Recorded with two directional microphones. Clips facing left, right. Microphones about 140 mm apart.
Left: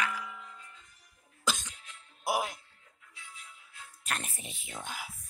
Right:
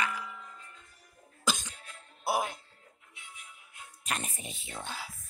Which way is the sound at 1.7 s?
45° right (ahead or behind).